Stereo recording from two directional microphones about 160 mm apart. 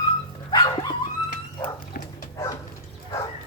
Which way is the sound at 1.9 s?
75° left (ahead or behind).